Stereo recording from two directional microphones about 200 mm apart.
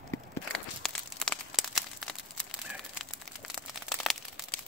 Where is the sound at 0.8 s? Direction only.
Centre (ahead or behind).